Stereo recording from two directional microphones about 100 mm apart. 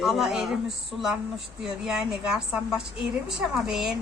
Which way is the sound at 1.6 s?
5° right (ahead or behind).